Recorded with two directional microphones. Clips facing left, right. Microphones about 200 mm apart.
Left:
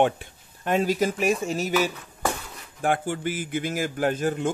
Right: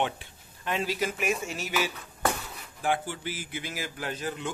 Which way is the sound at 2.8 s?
50° left (ahead or behind).